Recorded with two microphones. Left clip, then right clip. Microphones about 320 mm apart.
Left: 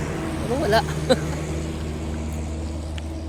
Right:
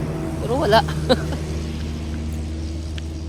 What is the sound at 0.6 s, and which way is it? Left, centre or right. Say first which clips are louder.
Speech: right 4 dB; centre.